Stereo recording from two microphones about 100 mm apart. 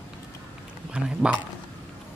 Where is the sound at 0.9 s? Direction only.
10° right (ahead or behind).